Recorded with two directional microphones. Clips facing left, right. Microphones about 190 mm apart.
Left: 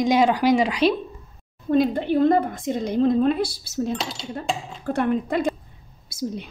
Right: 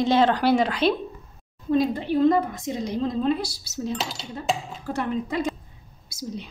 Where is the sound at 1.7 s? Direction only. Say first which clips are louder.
Left 2 dB; 55° left (ahead or behind).